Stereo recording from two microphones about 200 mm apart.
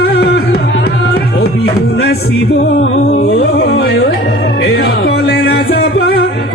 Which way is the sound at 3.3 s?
60° left (ahead or behind).